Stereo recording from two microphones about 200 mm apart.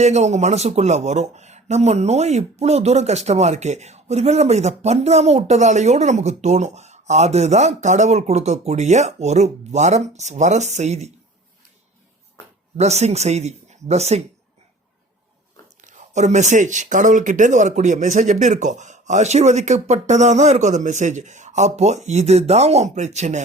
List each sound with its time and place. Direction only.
0.0 s speech: 35° right (ahead or behind)
12.7 s speech: 35° right (ahead or behind)
15.8 s speech: 40° right (ahead or behind)